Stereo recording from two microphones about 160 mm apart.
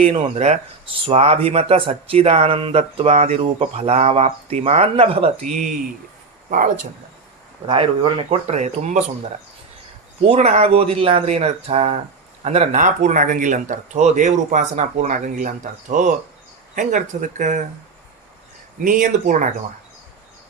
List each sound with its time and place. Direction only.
0.0 s speech: 40° right (ahead or behind)
7.7 s speech: 35° right (ahead or behind)
10.2 s speech: 45° right (ahead or behind)
18.8 s speech: 60° right (ahead or behind)